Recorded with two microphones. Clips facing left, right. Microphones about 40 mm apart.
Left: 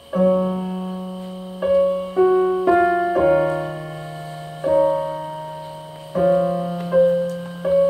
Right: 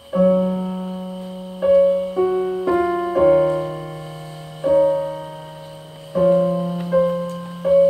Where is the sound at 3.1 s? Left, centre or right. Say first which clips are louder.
Right 2 dB; centre.